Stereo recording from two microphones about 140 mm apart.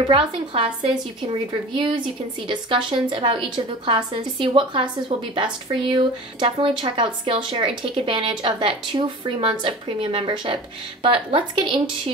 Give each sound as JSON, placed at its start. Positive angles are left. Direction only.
{"t": 0.0, "sound": "a woman's voice", "side_deg": -35}